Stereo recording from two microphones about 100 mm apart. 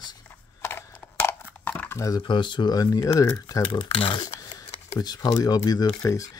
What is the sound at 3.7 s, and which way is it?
Speech, 60° left (ahead or behind).